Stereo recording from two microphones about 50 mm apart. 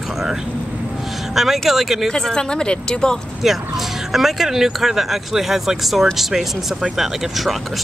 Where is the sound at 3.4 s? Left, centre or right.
Centre.